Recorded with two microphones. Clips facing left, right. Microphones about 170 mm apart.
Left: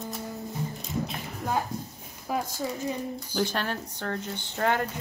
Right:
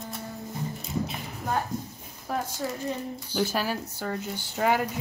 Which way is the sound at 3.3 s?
5° right (ahead or behind).